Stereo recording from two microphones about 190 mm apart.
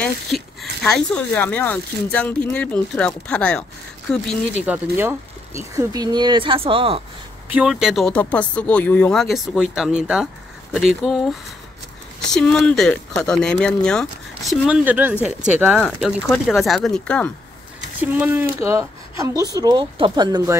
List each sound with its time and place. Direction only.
0.0 s speech: centre (ahead or behind)
4.6 s speech: 15° right (ahead or behind); by 7.0 s 30° right (ahead or behind)
7.5 s speech: centre (ahead or behind)
12.3 s speech: 5° left (ahead or behind)
18.0 s speech: 10° right (ahead or behind)